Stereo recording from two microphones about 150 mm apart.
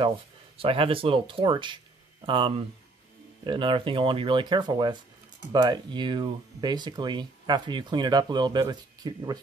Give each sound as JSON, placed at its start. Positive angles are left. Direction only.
{"t": 0.6, "sound": "speech", "side_deg": -40}